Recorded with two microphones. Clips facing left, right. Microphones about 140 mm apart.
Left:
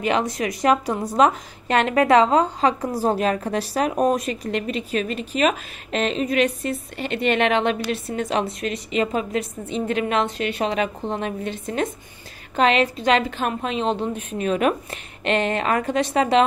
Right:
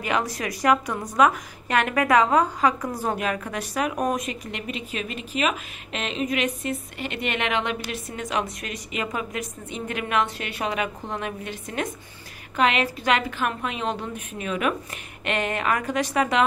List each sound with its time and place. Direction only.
0.0 s a woman's voice: 25° left (ahead or behind)